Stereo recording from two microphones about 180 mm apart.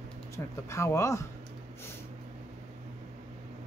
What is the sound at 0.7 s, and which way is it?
Speech, 15° left (ahead or behind).